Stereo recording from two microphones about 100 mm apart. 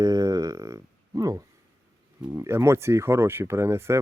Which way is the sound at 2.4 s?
25° right (ahead or behind).